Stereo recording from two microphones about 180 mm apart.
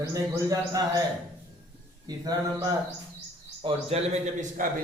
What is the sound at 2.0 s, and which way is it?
Mantra, 20° right (ahead or behind).